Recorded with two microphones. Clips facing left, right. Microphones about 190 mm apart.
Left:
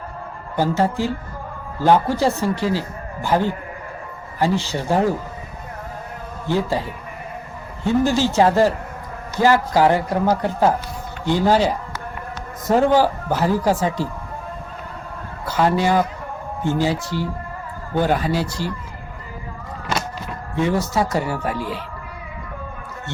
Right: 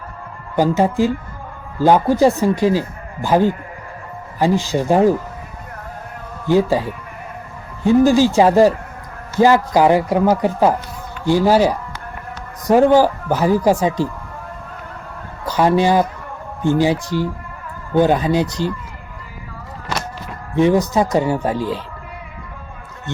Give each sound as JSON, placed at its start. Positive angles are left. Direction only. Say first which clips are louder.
{"t": 0.5, "sound": "a man's voice", "louder": "right 4 dB", "side_deg": -15}
{"t": 6.5, "sound": "a man's voice", "louder": "right 6 dB", "side_deg": -15}
{"t": 15.4, "sound": "a man's voice", "louder": "right 4 dB", "side_deg": -15}
{"t": 20.6, "sound": "a man's voice", "louder": "right 6 dB", "side_deg": -15}
{"t": 21.4, "sound": "speech", "louder": "right 5 dB", "side_deg": -35}